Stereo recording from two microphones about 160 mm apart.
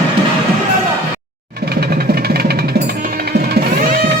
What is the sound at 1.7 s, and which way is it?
Music, 75° right (ahead or behind).